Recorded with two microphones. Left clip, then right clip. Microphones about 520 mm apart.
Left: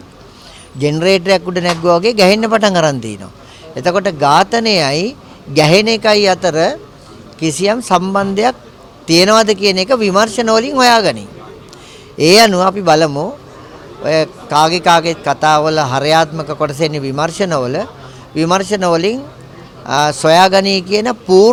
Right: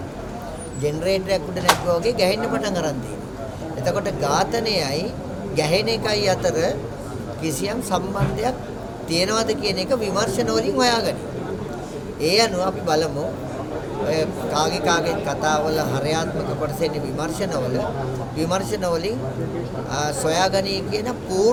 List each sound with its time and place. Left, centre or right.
0.8 s a man's voice: left
14.1 s a man's voice: left